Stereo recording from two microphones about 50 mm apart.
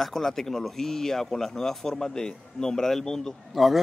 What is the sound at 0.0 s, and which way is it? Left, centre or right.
Speech, centre.